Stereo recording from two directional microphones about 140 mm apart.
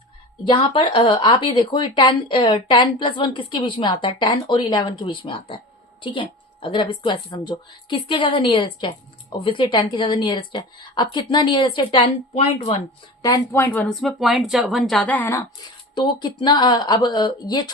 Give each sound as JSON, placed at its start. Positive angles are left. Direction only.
{"t": 0.4, "sound": "a woman's voice", "side_deg": 35}
{"t": 12.4, "sound": "speech", "side_deg": 45}
{"t": 13.2, "sound": "speech", "side_deg": 20}
{"t": 13.7, "sound": "speech", "side_deg": 5}
{"t": 16.4, "sound": "a woman's voice", "side_deg": 30}